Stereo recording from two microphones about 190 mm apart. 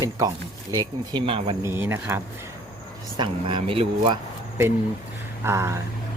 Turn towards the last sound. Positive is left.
turn(degrees=-15)  # may be behind; listen again after turning